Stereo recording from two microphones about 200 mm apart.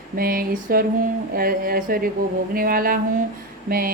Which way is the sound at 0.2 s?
45° right (ahead or behind).